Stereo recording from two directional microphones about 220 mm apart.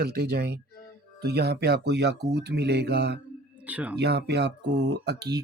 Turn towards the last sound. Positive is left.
turn(degrees=-50)  # may be behind; listen again after turning